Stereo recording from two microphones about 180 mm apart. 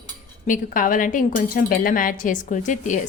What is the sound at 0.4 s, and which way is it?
A woman's voice, 45° left (ahead or behind).